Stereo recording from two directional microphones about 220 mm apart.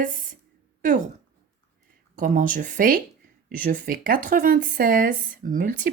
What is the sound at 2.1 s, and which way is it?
Speech, 35° right (ahead or behind).